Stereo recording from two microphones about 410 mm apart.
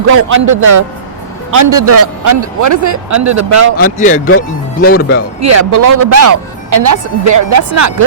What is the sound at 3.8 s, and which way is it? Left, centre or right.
Speech, centre.